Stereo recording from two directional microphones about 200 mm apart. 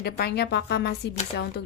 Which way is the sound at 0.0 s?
55° left (ahead or behind).